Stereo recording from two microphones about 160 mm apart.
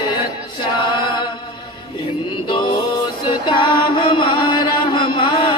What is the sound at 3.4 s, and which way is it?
Chant, 30° left (ahead or behind).